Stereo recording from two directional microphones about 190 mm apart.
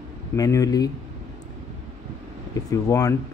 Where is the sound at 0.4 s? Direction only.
20° left (ahead or behind).